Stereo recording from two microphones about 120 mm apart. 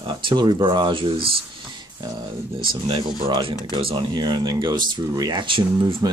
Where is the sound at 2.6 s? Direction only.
45° right (ahead or behind).